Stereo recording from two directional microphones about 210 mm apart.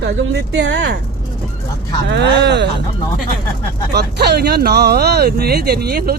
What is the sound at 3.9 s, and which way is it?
Speech, 50° right (ahead or behind).